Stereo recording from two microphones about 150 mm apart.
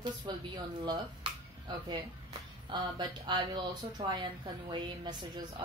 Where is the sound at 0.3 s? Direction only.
30° right (ahead or behind).